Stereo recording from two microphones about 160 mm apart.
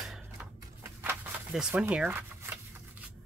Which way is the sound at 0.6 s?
15° right (ahead or behind).